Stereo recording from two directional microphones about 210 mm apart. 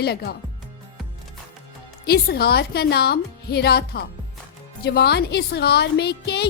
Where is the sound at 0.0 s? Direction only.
50° left (ahead or behind).